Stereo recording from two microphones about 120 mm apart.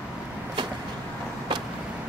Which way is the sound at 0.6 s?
40° right (ahead or behind).